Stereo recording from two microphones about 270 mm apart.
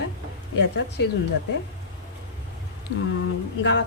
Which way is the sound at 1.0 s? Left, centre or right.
Left.